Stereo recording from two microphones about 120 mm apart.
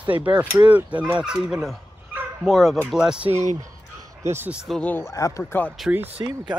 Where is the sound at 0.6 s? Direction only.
15° right (ahead or behind).